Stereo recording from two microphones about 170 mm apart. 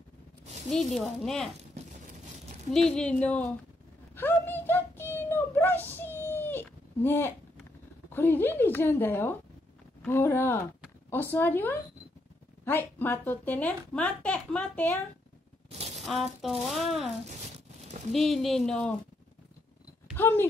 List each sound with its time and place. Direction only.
0.9 s speech: centre (ahead or behind)
2.7 s speech: 5° left (ahead or behind)
4.1 s a sound: 10° left (ahead or behind)
8.1 s speech: 10° left (ahead or behind)
15.7 s a sound: 40° right (ahead or behind)
16.0 s speech: centre (ahead or behind)
18.1 s speech: centre (ahead or behind)
20.2 s speech: 15° left (ahead or behind)